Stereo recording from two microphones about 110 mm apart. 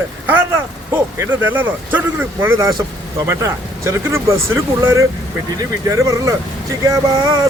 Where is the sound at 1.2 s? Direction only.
20° right (ahead or behind).